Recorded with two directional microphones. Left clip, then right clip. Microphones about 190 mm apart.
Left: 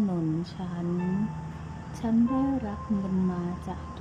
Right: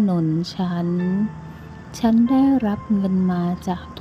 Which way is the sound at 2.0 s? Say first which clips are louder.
Right 9 dB; 35° right (ahead or behind).